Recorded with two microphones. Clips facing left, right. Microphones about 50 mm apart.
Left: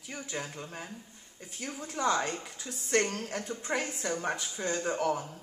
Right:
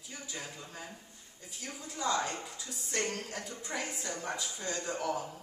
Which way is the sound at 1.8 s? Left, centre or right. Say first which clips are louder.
Left 3 dB; left.